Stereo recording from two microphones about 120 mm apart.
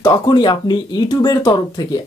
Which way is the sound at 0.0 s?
40° left (ahead or behind).